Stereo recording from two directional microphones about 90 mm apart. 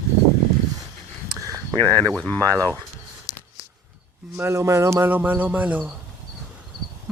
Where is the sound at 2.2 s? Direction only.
15° left (ahead or behind).